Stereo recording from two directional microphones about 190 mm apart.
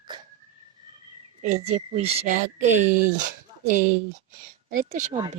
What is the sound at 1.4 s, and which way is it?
Speech, 35° right (ahead or behind).